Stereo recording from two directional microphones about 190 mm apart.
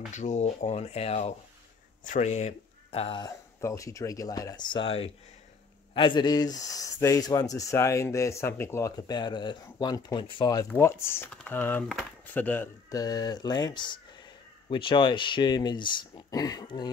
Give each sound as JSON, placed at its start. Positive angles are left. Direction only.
{"t": 0.1, "sound": "speech", "side_deg": 40}